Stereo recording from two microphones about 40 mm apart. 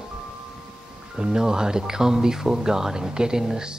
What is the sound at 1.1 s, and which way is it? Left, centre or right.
Speech, centre.